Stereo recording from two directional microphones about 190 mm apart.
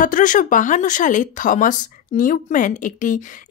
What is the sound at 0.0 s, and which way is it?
Speech, 45° left (ahead or behind).